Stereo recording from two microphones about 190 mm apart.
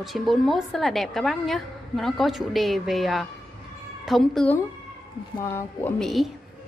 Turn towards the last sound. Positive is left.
turn(degrees=0)  # may be behind; listen again after turning